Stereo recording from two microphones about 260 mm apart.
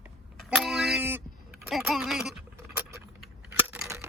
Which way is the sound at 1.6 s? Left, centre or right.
Centre.